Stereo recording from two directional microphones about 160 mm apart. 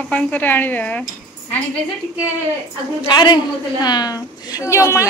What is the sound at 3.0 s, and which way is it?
A woman's voice, 25° left (ahead or behind).